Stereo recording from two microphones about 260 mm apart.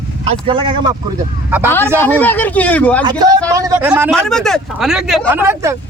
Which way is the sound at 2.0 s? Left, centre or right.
Centre.